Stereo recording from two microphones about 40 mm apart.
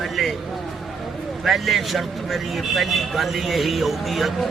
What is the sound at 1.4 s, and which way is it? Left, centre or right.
Speech, centre.